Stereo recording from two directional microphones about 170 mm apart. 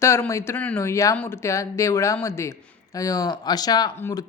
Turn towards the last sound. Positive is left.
turn(degrees=15)  # may be behind; listen again after turning